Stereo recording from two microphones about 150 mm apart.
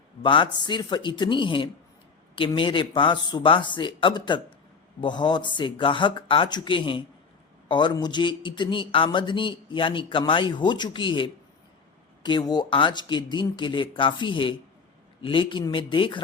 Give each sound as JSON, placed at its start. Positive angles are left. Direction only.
{"t": 0.2, "sound": "speech", "side_deg": 30}